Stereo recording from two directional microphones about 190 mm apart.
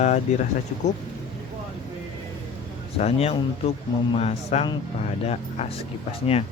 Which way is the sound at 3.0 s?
35° left (ahead or behind).